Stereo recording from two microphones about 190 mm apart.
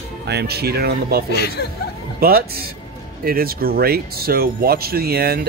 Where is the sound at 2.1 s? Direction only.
50° right (ahead or behind).